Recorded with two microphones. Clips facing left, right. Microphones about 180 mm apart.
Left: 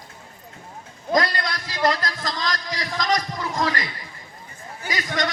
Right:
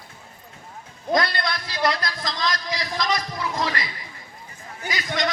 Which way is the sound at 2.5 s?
45° left (ahead or behind).